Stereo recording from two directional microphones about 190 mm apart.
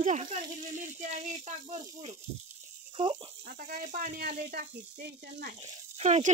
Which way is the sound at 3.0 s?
25° right (ahead or behind).